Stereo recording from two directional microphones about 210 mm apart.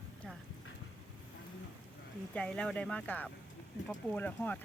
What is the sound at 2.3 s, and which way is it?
Speech, 5° left (ahead or behind).